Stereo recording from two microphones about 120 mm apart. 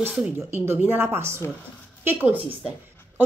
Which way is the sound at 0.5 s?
20° right (ahead or behind).